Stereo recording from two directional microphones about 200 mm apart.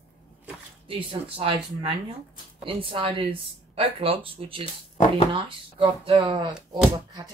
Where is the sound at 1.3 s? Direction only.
25° right (ahead or behind).